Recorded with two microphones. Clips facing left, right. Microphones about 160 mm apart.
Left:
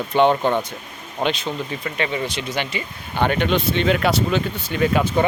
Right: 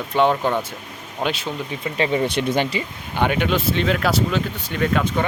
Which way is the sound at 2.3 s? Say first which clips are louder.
Right 6 dB; 60° right (ahead or behind).